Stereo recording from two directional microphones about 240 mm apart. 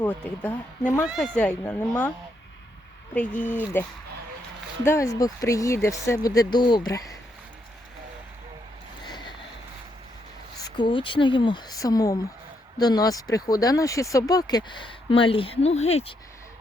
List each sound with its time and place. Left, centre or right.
0.0 s speech: centre
3.2 s speech: centre
9.0 s a sound: centre
10.6 s speech: centre